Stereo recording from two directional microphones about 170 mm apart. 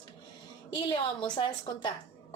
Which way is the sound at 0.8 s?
30° left (ahead or behind).